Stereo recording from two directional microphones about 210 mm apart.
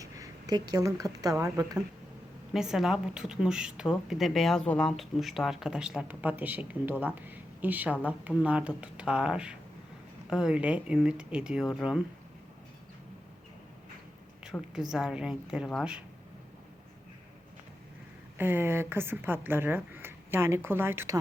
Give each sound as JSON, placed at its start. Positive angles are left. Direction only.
{"t": 0.0, "sound": "speech", "side_deg": -15}
{"t": 2.5, "sound": "speech", "side_deg": 0}
{"t": 14.5, "sound": "speech", "side_deg": -5}
{"t": 18.3, "sound": "a woman's voice", "side_deg": -10}